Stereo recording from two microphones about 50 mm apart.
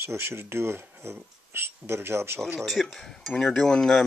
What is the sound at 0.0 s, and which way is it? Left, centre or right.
Speech, right.